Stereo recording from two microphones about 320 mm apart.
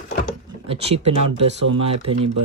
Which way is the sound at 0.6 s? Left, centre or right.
Centre.